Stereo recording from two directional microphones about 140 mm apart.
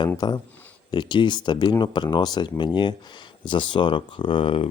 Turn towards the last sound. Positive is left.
turn(degrees=40)  # may be behind; listen again after turning